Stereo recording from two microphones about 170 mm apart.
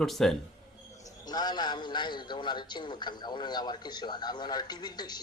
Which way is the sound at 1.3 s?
25° left (ahead or behind).